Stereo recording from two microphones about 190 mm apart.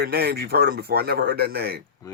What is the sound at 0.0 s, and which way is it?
Speech, 55° right (ahead or behind).